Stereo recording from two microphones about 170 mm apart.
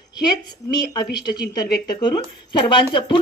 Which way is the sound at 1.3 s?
65° left (ahead or behind).